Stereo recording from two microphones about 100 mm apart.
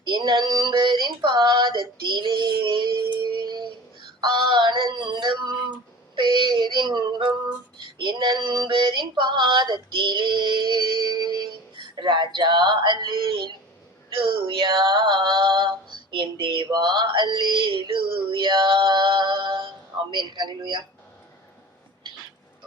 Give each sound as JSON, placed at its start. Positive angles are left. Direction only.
{"t": 0.0, "sound": "a sound", "side_deg": -50}
{"t": 4.2, "sound": "synthetic singing", "side_deg": -50}
{"t": 6.1, "sound": "female singing", "side_deg": -50}